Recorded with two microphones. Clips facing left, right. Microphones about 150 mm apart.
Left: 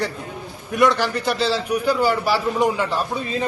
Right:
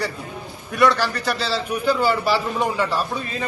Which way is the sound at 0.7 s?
20° left (ahead or behind).